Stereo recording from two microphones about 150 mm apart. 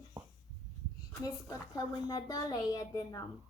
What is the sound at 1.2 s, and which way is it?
A woman's voice, 25° left (ahead or behind).